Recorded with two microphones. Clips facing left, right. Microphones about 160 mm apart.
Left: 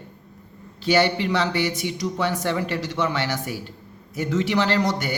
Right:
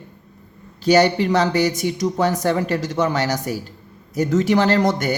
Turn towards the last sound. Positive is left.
turn(degrees=-45)  # may be behind; listen again after turning